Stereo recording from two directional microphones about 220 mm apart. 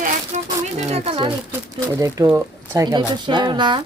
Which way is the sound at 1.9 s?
15° right (ahead or behind).